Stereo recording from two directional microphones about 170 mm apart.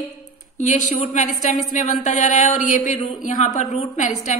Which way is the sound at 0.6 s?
45° left (ahead or behind).